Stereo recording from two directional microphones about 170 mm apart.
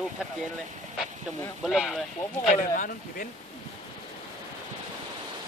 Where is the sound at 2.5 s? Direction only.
50° left (ahead or behind).